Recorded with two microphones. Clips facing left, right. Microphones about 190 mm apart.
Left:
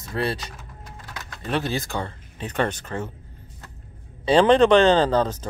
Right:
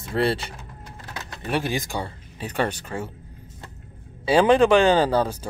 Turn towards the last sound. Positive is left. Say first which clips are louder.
# left 1 dB
turn(degrees=-10)  # may be behind; listen again after turning